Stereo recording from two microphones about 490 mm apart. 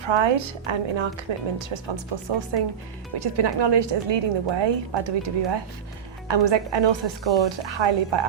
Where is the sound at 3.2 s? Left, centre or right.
Right.